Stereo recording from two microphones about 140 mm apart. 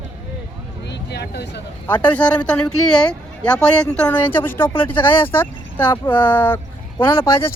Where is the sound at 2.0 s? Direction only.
10° left (ahead or behind).